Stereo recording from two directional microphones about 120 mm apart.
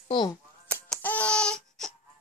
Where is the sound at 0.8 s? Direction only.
10° left (ahead or behind).